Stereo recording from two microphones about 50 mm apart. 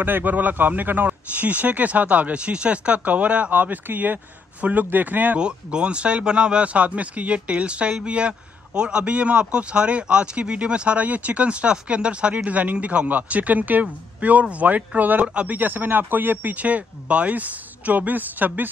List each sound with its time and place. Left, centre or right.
0.0 s speech: right
5.4 s speech: centre
15.2 s speech: right
15.5 s speech: right